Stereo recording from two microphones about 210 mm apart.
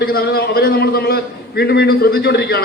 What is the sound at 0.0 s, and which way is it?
A man's voice, 45° left (ahead or behind).